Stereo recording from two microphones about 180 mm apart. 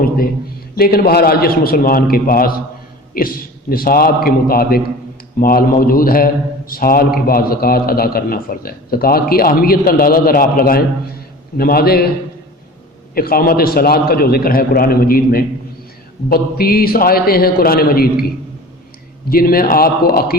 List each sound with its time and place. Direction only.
0.8 s a man's voice: 60° left (ahead or behind)
13.1 s a man's voice: 55° left (ahead or behind)
19.3 s a man's voice: 55° left (ahead or behind)